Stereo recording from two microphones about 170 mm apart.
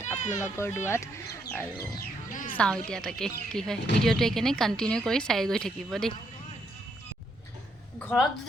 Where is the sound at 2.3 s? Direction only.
50° left (ahead or behind).